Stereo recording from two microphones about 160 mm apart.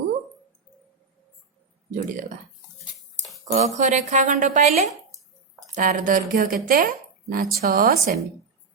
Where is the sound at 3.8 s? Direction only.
50° right (ahead or behind).